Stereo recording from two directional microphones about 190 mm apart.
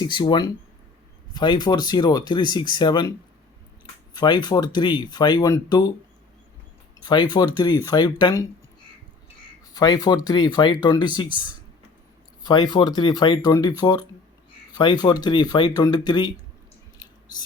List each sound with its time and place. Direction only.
0.0 s speech: 25° left (ahead or behind)
7.0 s speech: 25° left (ahead or behind)
9.7 s speech: 20° left (ahead or behind)
12.4 s speech: 20° left (ahead or behind)